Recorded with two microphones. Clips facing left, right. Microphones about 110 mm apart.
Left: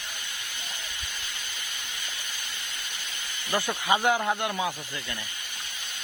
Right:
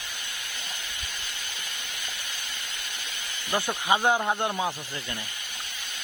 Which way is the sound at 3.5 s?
20° right (ahead or behind).